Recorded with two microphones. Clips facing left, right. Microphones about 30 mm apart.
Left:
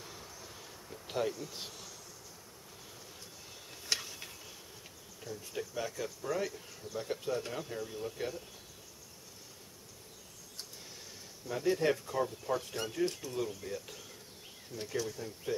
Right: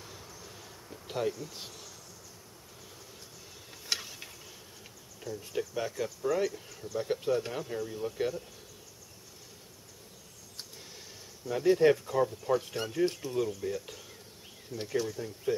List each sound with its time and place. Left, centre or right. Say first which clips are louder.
0.0 s insect: right 1 dB; centre
1.3 s speech: right 1 dB; centre
3.8 s a sound: right 1 dB; centre
5.3 s speech: right 5 dB; centre
5.8 s speech: right 4 dB; centre
11.4 s speech: right 7 dB; centre
14.7 s speech: right 4 dB; centre
15.0 s speech: right 6 dB; centre